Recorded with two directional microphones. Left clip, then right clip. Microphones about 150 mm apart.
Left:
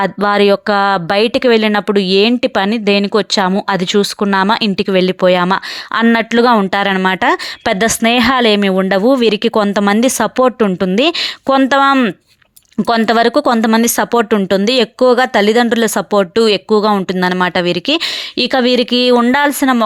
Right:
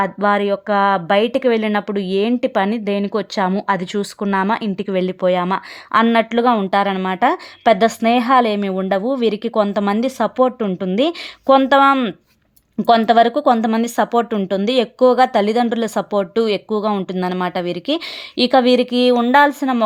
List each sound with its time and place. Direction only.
0.0 s speech: 30° left (ahead or behind)
1.3 s speech: 20° left (ahead or behind)